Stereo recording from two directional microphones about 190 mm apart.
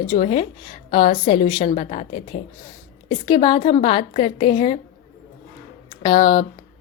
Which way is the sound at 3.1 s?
25° left (ahead or behind).